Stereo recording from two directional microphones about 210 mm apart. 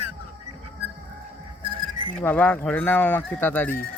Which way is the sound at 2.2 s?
10° left (ahead or behind).